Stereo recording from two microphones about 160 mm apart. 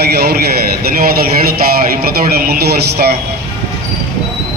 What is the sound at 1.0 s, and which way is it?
Speech, 70° right (ahead or behind).